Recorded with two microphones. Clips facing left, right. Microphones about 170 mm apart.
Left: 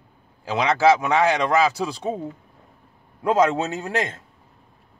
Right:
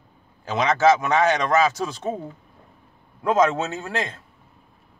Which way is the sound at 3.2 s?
10° left (ahead or behind).